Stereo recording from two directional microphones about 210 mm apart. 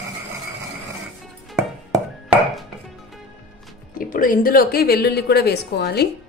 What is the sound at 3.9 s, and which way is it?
A woman's voice, 40° left (ahead or behind).